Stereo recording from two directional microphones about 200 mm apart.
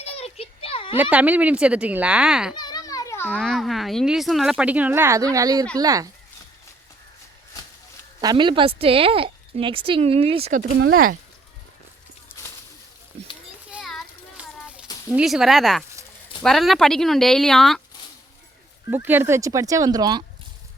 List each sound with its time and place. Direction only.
0.0 s a sound: 30° left (ahead or behind)
1.1 s speech: 5° right (ahead or behind)
2.6 s children playing: 20° left (ahead or behind)
3.3 s speech: centre (ahead or behind); by 6.1 s 15° right (ahead or behind)
8.2 s speech: 20° right (ahead or behind)
10.8 s speech: 90° right
13.7 s a sound: centre (ahead or behind)
15.1 s speech: centre (ahead or behind)
18.9 s speech: 10° right (ahead or behind)